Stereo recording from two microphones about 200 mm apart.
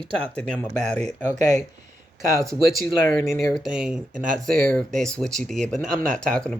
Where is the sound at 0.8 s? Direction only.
35° right (ahead or behind).